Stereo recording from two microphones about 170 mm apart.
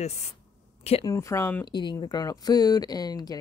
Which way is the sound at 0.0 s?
40° left (ahead or behind).